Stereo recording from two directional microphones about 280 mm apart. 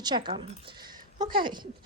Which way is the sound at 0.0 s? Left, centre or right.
Centre.